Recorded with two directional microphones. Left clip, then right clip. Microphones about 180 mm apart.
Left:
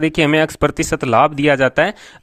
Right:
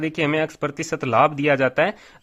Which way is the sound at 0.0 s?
50° left (ahead or behind).